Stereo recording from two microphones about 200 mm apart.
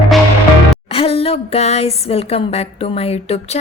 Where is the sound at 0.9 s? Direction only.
30° left (ahead or behind).